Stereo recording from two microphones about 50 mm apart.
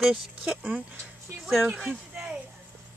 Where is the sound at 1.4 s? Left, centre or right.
Centre.